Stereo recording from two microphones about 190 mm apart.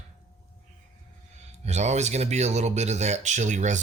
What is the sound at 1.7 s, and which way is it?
Speech, 35° right (ahead or behind).